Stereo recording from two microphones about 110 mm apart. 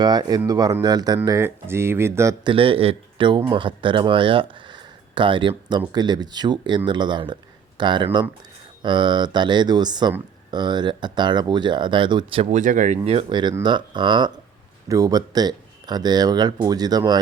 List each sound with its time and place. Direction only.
0.0 s speech: 35° right (ahead or behind)
1.4 s speech: 20° right (ahead or behind)
2.4 s speech: 55° right (ahead or behind)
12.5 s speech: 90° right
13.3 s speech: 40° right (ahead or behind)
14.8 s speech: 35° right (ahead or behind)